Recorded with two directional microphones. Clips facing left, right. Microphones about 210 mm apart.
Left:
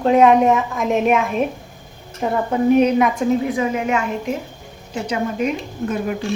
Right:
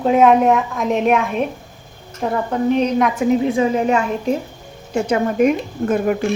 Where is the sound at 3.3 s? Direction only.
30° right (ahead or behind).